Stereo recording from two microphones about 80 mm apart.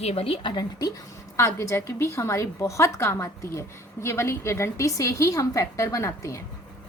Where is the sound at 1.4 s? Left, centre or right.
Left.